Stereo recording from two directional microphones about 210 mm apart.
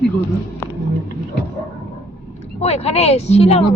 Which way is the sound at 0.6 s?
10° left (ahead or behind).